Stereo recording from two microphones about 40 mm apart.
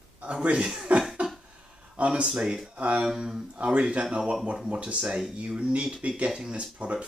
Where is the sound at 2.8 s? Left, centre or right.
Right.